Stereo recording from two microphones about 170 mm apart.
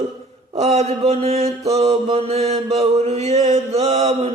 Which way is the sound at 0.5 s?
40° right (ahead or behind).